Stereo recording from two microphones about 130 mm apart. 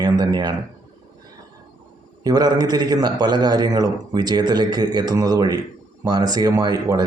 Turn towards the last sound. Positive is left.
turn(degrees=-30)  # may be behind; listen again after turning